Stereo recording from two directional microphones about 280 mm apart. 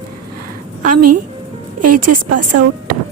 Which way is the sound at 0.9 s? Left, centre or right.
Right.